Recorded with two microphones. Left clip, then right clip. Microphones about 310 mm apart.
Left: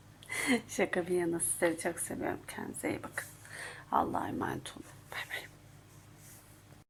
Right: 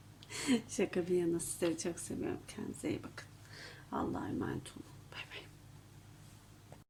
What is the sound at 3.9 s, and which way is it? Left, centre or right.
Speech, left.